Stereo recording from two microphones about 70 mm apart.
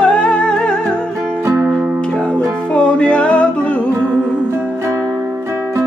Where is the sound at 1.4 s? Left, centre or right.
Right.